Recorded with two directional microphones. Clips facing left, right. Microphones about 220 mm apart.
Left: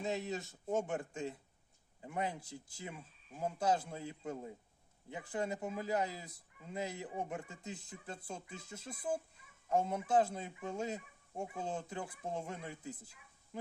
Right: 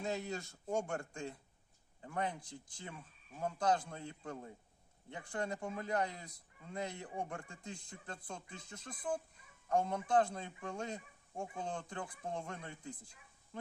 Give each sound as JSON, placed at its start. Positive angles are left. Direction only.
{"t": 0.0, "sound": "a man's voice", "side_deg": 0}